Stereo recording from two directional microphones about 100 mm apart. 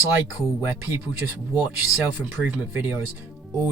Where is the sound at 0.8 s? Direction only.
20° right (ahead or behind).